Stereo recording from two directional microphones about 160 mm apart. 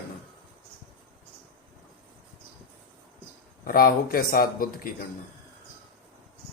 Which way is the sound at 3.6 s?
65° left (ahead or behind).